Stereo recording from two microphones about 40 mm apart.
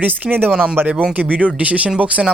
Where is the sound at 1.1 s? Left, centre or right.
Right.